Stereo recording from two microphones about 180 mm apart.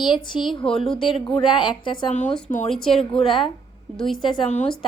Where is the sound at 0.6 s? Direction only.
Centre (ahead or behind).